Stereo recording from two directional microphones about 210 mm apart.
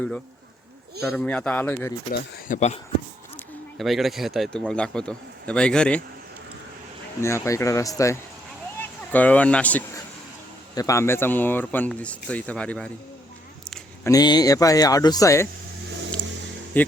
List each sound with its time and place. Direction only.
1.0 s speech: 5° left (ahead or behind)
2.1 s speech: 50° left (ahead or behind)
3.3 s speech: centre (ahead or behind)
7.2 s speech: 10° left (ahead or behind)
14.0 s speech: 15° left (ahead or behind)
16.7 s speech: 10° left (ahead or behind)